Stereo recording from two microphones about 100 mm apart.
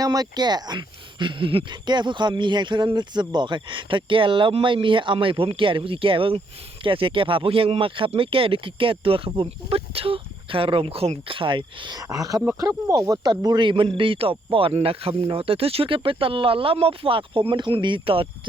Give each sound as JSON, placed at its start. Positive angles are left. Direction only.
{"t": 0.0, "sound": "speech", "side_deg": -40}